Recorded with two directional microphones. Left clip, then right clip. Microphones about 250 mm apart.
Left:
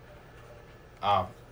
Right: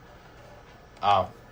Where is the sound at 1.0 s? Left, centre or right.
Centre.